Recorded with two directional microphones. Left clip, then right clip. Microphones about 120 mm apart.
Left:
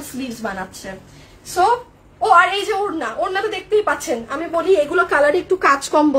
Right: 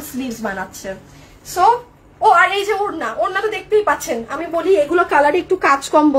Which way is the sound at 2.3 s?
20° left (ahead or behind).